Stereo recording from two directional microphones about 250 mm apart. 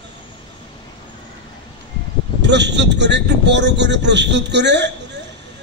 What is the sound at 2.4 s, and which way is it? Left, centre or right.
A man's voice, right.